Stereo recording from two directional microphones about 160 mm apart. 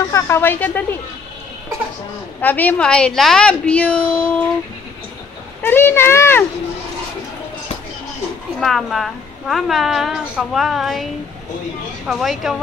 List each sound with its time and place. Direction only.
0.1 s a woman's voice: 15° left (ahead or behind)
2.4 s a woman's voice: 10° left (ahead or behind)
5.6 s a woman's voice: 15° left (ahead or behind)
8.5 s a woman's voice: centre (ahead or behind)
12.1 s a woman's voice: centre (ahead or behind)